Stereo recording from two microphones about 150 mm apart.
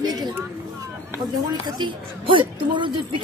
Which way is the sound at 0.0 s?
25° right (ahead or behind).